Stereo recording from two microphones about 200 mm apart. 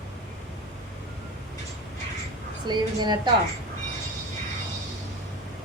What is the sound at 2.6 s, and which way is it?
Speech, 20° right (ahead or behind).